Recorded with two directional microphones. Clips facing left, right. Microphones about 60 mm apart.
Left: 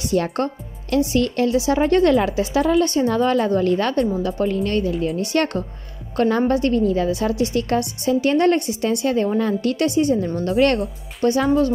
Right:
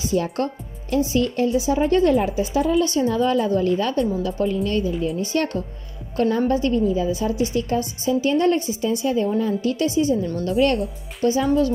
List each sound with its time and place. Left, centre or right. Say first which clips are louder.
0.1 s a woman's voice: left 2 dB; left
0.8 s a woman's voice: left 2 dB; left